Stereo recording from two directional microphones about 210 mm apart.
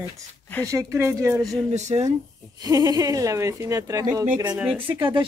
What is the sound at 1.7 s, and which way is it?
Speech, 30° right (ahead or behind).